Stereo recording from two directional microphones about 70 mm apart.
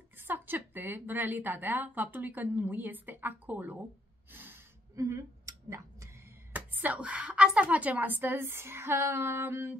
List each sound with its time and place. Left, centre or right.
0.2 s a woman's voice: right
4.3 s snort: right
4.9 s a sound: right
6.5 s a woman's voice: right
9.1 s female singing: right